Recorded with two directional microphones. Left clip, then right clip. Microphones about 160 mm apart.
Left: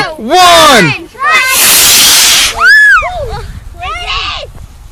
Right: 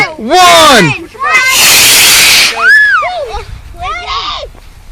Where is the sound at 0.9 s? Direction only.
55° right (ahead or behind).